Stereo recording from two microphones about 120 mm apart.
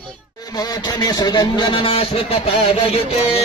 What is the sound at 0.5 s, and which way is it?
Speech, 30° left (ahead or behind).